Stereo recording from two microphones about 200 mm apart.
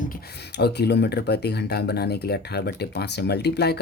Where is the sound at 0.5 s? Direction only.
55° left (ahead or behind).